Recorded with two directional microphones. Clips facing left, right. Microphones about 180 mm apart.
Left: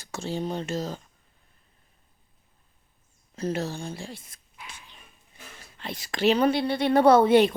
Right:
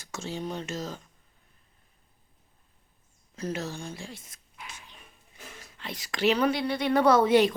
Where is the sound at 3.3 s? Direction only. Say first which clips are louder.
Left 4 dB; 30° left (ahead or behind).